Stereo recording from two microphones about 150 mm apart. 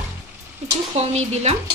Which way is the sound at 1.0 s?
45° right (ahead or behind).